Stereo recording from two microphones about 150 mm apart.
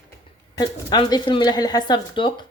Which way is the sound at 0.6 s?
30° left (ahead or behind).